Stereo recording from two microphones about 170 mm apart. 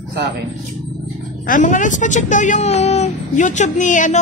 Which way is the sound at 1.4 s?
50° left (ahead or behind).